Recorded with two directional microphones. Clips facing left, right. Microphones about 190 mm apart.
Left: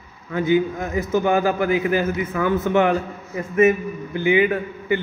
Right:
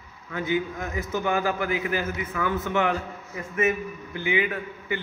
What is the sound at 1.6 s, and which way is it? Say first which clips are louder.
A man's voice: left 7 dB; 20° left (ahead or behind).